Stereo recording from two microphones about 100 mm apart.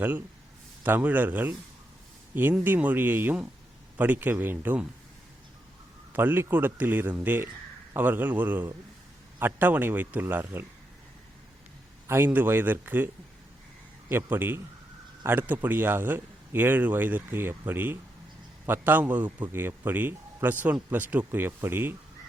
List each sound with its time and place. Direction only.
0.9 s a man's voice: 20° right (ahead or behind)
6.1 s a man's voice: 20° right (ahead or behind)
12.0 s a man's voice: 25° right (ahead or behind)
14.1 s a man's voice: 20° right (ahead or behind)